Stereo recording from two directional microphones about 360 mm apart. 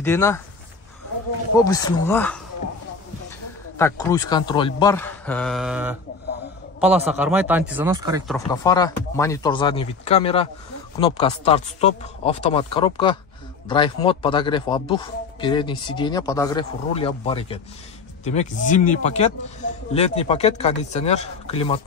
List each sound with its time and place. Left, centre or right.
0.0 s speech: centre
1.6 s speech: centre
3.7 s speech: centre
8.5 s speech: centre